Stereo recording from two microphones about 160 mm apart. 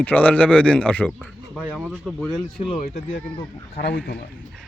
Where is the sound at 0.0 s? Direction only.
10° left (ahead or behind).